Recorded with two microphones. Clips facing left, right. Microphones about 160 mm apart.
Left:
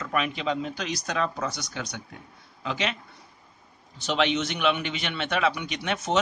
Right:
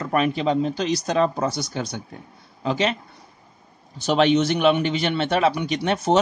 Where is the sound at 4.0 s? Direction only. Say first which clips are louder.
Right 7 dB; 40° right (ahead or behind).